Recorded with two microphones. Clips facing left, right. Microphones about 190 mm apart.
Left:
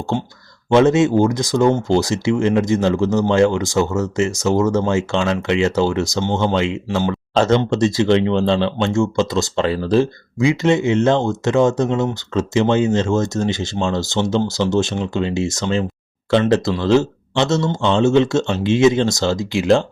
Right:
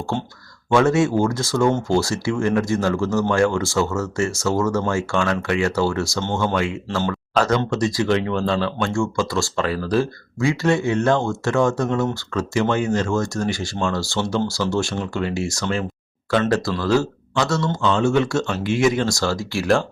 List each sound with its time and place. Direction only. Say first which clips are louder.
0.7 s speech: left 4 dB; 20° left (ahead or behind)